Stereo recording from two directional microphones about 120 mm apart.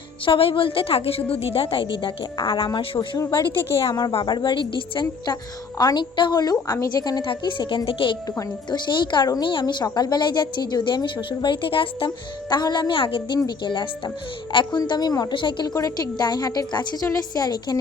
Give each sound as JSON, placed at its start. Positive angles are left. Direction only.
{"t": 0.3, "sound": "a woman's voice", "side_deg": 50}
{"t": 3.2, "sound": "a woman's voice", "side_deg": 25}
{"t": 4.1, "sound": "a woman's voice", "side_deg": 40}
{"t": 15.7, "sound": "a woman's voice", "side_deg": 30}